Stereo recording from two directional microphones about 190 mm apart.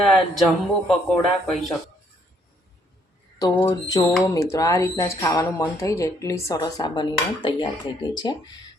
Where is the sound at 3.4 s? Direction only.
15° left (ahead or behind).